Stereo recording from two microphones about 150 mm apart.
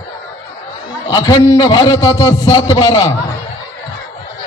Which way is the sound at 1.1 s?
25° left (ahead or behind).